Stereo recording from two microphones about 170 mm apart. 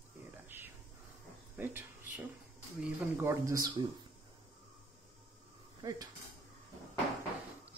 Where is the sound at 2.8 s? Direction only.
15° right (ahead or behind).